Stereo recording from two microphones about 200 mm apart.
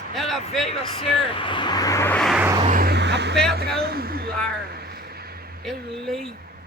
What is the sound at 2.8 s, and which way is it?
Vehicle, 60° right (ahead or behind).